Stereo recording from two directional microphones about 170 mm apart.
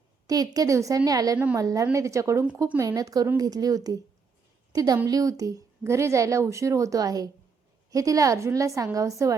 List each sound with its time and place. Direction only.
0.3 s a woman's voice: 20° right (ahead or behind)